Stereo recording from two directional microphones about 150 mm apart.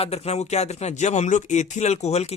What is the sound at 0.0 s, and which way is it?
Speech, 45° left (ahead or behind).